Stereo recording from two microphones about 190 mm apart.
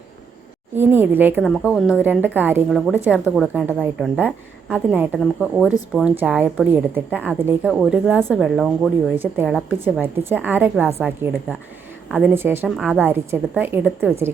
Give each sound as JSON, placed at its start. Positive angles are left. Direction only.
{"t": 0.8, "sound": "a woman's voice", "side_deg": -10}
{"t": 1.4, "sound": "a woman's voice", "side_deg": 0}
{"t": 9.1, "sound": "a woman's voice", "side_deg": -10}